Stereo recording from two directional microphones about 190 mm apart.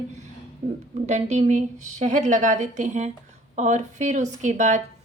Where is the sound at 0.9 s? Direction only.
35° right (ahead or behind).